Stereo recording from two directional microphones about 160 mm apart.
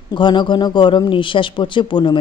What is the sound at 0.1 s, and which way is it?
A man's voice, 30° left (ahead or behind).